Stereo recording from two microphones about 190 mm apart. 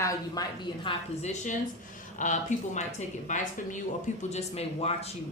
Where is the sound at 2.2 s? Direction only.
40° left (ahead or behind).